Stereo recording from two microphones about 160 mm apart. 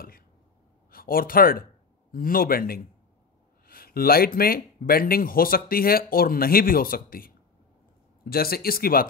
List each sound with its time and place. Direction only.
0.9 s speech: 65° left (ahead or behind)